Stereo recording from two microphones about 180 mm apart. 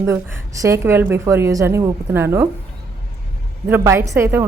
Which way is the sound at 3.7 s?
10° right (ahead or behind).